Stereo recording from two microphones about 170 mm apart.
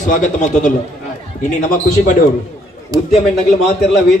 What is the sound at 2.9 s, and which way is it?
Speech, 20° right (ahead or behind).